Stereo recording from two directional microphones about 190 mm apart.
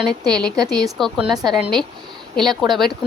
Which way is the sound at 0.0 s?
5° left (ahead or behind).